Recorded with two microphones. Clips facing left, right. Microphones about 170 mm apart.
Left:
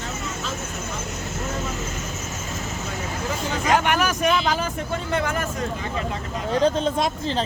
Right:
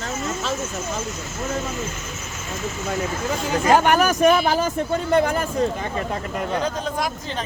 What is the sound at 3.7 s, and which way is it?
Speech, 40° right (ahead or behind).